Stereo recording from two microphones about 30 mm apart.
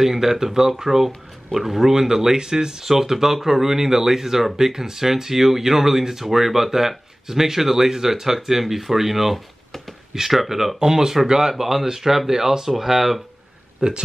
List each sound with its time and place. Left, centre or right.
0.0 s speech: centre
2.8 s speech: centre
10.8 s speech: right
11.5 s speech: centre
13.8 s speech: right